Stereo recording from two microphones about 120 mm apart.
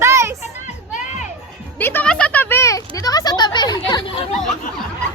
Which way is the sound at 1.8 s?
20° left (ahead or behind).